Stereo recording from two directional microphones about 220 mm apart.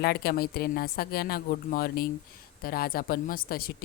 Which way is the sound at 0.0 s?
45° left (ahead or behind).